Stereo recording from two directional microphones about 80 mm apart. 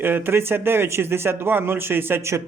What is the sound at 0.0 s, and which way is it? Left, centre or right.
Speech, right.